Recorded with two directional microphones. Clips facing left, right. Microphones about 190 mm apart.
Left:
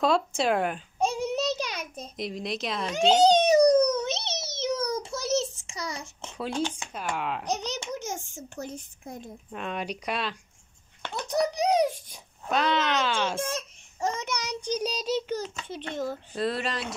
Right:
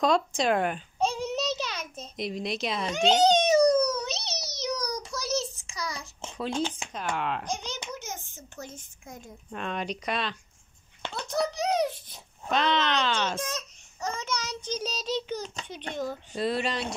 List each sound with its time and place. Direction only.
0.0 s babbling: 5° left (ahead or behind)
2.1 s a sound: centre (ahead or behind); by 6.0 s 25° left (ahead or behind)
6.3 s speech: 5° left (ahead or behind)
7.5 s speech: 40° left (ahead or behind)
8.0 s a sound: 85° left
8.5 s speech: 40° left (ahead or behind)
9.5 s speech: 5° left (ahead or behind)
11.1 s babbling: 15° left (ahead or behind)
13.4 s child singing: 30° left (ahead or behind); by 15.5 s 5° left (ahead or behind)
16.0 s speech: centre (ahead or behind)